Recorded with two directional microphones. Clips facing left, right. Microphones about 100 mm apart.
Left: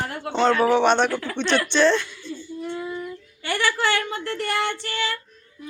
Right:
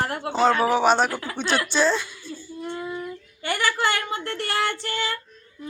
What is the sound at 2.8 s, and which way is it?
Female singing, 10° right (ahead or behind).